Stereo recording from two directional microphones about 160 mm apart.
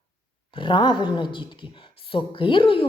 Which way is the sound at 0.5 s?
30° left (ahead or behind).